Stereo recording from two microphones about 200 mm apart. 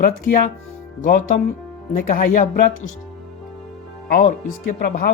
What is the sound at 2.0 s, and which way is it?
Speech, 45° left (ahead or behind).